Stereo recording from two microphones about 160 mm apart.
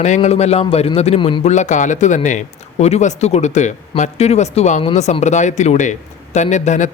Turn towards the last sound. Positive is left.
turn(degrees=50)  # may be behind; listen again after turning